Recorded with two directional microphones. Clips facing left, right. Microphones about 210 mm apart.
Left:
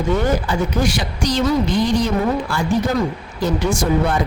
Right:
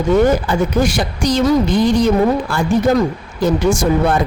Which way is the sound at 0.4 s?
50° right (ahead or behind).